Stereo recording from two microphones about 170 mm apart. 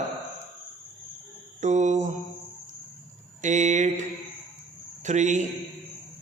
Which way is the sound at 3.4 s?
45° right (ahead or behind).